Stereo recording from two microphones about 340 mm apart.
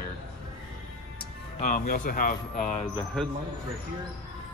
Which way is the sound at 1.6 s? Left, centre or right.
Left.